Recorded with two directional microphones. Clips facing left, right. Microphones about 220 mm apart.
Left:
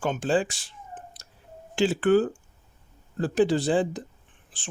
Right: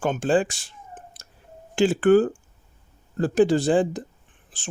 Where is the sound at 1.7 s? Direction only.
50° right (ahead or behind).